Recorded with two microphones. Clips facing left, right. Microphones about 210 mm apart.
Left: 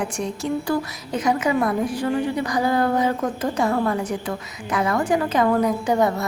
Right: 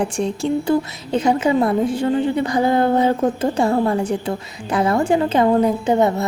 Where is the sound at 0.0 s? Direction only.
30° right (ahead or behind).